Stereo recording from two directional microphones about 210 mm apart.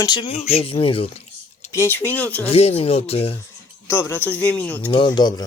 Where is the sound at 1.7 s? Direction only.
10° left (ahead or behind).